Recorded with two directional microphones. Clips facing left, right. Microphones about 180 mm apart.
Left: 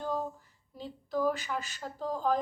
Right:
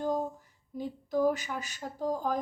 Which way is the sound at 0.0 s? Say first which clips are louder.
Right 3 dB; 15° right (ahead or behind).